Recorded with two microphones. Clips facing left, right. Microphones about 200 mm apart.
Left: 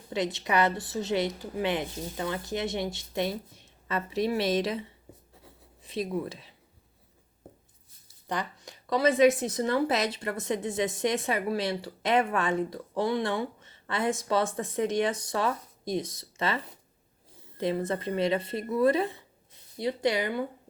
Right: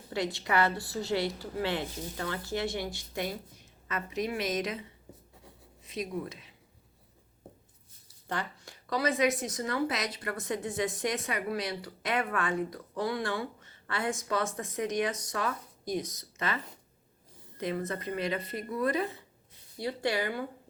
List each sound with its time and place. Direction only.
0.1 s speech: 20° left (ahead or behind)
8.3 s speech: 20° left (ahead or behind)
17.6 s speech: 30° left (ahead or behind)